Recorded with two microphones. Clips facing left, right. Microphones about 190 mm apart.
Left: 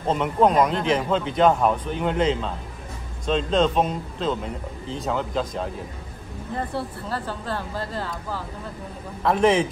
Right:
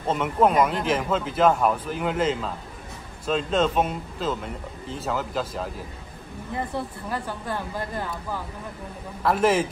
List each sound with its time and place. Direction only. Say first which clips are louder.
0.1 s speech: left 1 dB; centre (ahead or behind)
7.1 s a woman's voice: left 1 dB; 15° right (ahead or behind)
9.2 s speech: left 2 dB; 5° right (ahead or behind)